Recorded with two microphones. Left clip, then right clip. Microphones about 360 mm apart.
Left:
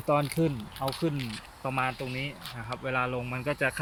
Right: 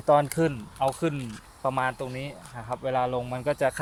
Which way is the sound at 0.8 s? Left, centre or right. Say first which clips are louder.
Right 5 dB; right.